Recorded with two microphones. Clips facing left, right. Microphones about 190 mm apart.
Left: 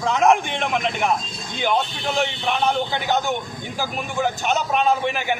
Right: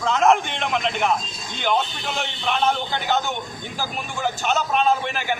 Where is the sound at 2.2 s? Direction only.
15° left (ahead or behind).